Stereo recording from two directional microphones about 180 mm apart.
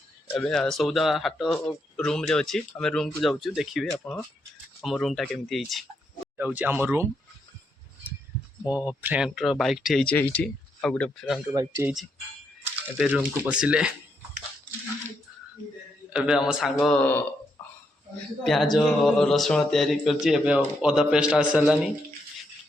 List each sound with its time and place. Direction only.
0.3 s speech: 5° left (ahead or behind); by 7.1 s 10° right (ahead or behind)
8.6 s speech: 10° right (ahead or behind)
11.5 s speech: 15° right (ahead or behind)
13.0 s speech: 5° right (ahead or behind)
16.1 s speech: 5° right (ahead or behind)
17.6 s a sound: 10° left (ahead or behind)
18.4 s speech: centre (ahead or behind)